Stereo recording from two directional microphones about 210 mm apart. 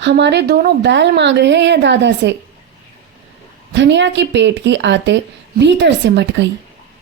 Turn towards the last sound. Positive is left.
turn(degrees=-60)  # may be behind; listen again after turning